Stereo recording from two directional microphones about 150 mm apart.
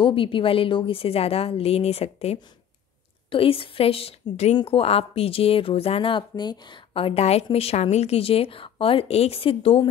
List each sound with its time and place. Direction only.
0.0 s speech: 35° left (ahead or behind)